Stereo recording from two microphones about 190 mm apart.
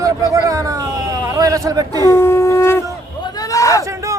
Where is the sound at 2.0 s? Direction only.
15° left (ahead or behind).